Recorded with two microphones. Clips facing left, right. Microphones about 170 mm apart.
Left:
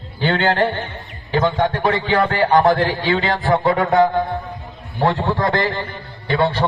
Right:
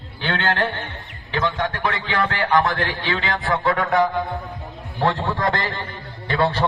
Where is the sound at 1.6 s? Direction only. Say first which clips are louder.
Left 6 dB; 25° left (ahead or behind); by 3.3 s 40° left (ahead or behind).